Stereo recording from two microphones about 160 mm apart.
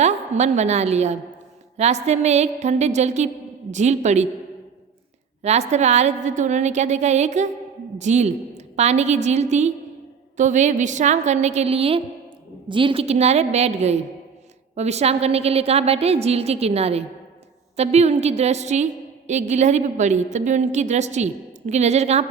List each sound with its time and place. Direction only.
0.0 s a woman's voice: 45° right (ahead or behind)
5.4 s a woman's voice: 45° right (ahead or behind)